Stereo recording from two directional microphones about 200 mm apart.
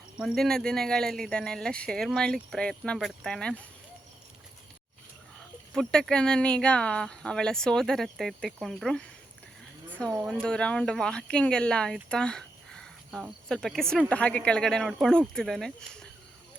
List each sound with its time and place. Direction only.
0.2 s speech: centre (ahead or behind)
5.7 s speech: 5° left (ahead or behind)
10.2 s speech: centre (ahead or behind)